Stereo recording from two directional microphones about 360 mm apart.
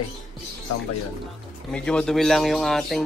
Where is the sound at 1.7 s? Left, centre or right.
Centre.